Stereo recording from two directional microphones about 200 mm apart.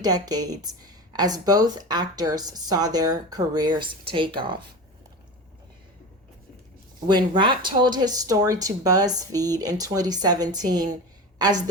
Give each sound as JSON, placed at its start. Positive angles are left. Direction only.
{"t": 0.0, "sound": "speech", "side_deg": -20}
{"t": 7.1, "sound": "a woman's voice", "side_deg": -20}